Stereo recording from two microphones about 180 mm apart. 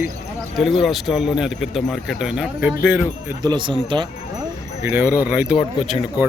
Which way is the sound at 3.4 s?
25° right (ahead or behind).